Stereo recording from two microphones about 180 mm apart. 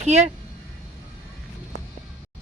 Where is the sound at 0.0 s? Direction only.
40° right (ahead or behind).